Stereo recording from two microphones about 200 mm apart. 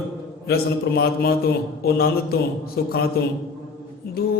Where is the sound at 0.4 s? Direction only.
50° left (ahead or behind).